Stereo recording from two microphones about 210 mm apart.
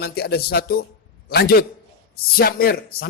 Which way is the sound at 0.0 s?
50° left (ahead or behind).